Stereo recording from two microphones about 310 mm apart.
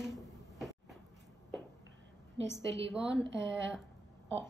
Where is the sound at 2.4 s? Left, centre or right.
Right.